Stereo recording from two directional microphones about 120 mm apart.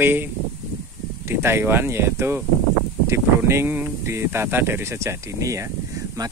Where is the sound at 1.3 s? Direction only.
20° right (ahead or behind).